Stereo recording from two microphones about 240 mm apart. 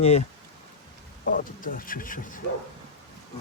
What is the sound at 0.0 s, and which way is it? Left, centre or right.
Speech, left.